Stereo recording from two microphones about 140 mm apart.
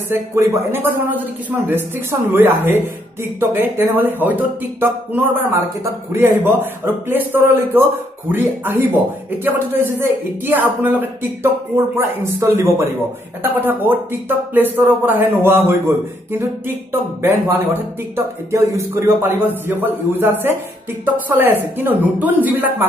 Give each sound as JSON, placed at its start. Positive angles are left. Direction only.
{"t": 0.1, "sound": "a man's voice", "side_deg": -20}